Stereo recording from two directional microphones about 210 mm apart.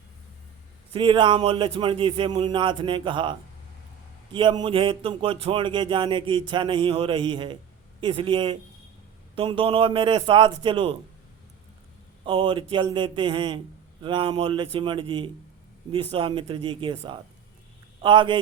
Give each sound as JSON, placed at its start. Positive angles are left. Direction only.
{"t": 0.9, "sound": "a man's voice", "side_deg": -25}
{"t": 12.2, "sound": "a man's voice", "side_deg": -25}